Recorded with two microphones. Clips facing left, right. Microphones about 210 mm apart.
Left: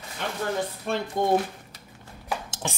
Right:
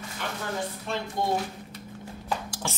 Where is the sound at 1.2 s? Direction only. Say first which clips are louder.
Left 4 dB; 50° left (ahead or behind).